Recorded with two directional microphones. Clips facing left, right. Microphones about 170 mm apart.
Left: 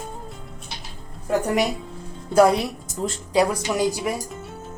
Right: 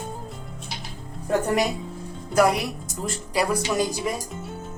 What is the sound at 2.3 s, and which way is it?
Speech, 30° left (ahead or behind).